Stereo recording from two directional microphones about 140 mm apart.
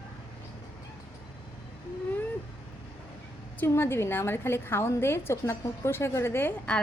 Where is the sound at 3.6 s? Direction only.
15° left (ahead or behind).